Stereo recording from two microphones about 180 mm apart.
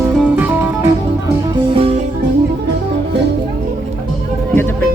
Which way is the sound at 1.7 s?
35° right (ahead or behind).